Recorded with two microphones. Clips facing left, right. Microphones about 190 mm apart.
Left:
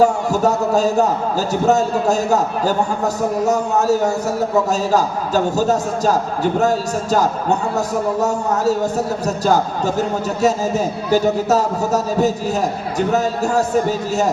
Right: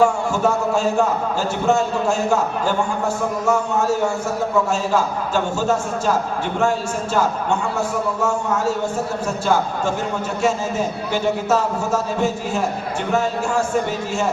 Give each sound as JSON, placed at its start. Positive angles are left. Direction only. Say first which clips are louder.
{"t": 0.0, "sound": "a man's voice", "louder": "left 2 dB", "side_deg": 40}